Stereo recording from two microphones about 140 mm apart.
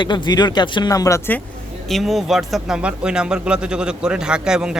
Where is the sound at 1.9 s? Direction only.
Centre (ahead or behind).